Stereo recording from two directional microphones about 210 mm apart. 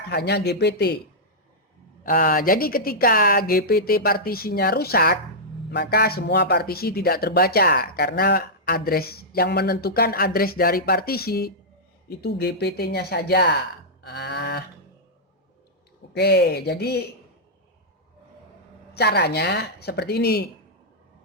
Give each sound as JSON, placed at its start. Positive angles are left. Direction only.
{"t": 0.1, "sound": "speech", "side_deg": 50}
{"t": 2.0, "sound": "speech", "side_deg": 40}
{"t": 14.0, "sound": "a sound", "side_deg": 50}
{"t": 16.1, "sound": "speech", "side_deg": 50}
{"t": 18.9, "sound": "speech", "side_deg": 50}